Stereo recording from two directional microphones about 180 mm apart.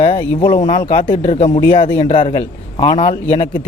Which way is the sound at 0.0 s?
30° left (ahead or behind).